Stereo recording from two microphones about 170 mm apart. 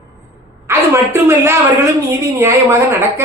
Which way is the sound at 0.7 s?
15° right (ahead or behind).